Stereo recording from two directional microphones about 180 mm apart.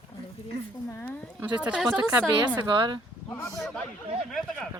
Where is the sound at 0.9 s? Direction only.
10° left (ahead or behind).